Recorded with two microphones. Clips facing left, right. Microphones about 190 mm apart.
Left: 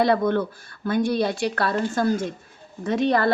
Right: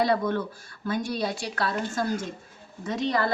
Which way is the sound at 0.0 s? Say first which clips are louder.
Left 4 dB; 60° left (ahead or behind).